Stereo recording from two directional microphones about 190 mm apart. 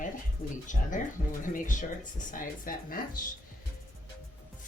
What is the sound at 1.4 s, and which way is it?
Speech, 45° left (ahead or behind).